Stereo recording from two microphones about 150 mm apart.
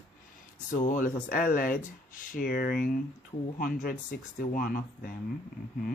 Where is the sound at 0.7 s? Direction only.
60° left (ahead or behind).